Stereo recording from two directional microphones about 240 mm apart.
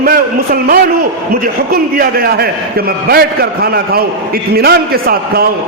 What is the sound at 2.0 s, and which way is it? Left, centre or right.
A man's voice, right.